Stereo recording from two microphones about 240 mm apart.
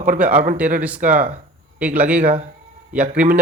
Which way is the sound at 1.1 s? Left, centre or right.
Right.